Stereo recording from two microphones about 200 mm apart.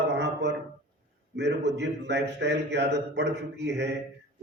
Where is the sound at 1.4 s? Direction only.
60° right (ahead or behind).